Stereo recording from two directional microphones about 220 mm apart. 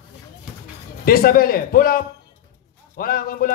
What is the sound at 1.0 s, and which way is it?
A man's voice, 40° left (ahead or behind).